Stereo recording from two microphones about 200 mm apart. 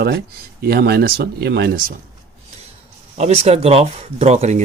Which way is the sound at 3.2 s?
30° right (ahead or behind).